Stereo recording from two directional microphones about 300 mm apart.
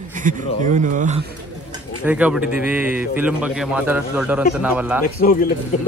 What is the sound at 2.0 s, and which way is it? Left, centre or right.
A man's voice, centre.